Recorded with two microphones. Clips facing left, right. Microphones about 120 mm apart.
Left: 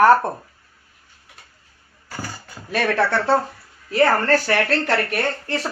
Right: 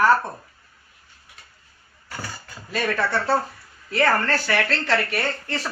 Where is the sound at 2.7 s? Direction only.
70° left (ahead or behind).